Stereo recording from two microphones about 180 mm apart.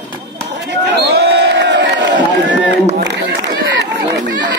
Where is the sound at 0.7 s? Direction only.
70° right (ahead or behind).